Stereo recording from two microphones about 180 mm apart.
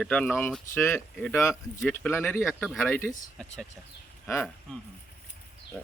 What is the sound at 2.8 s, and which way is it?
Speech, 10° left (ahead or behind).